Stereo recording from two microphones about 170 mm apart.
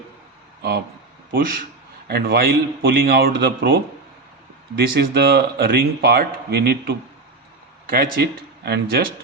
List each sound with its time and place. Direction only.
1.3 s speech: 55° right (ahead or behind)
2.0 s speech: 65° right (ahead or behind)
4.9 s speech: 65° right (ahead or behind)